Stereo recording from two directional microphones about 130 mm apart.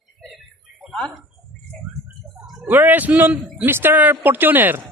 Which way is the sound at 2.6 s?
15° right (ahead or behind).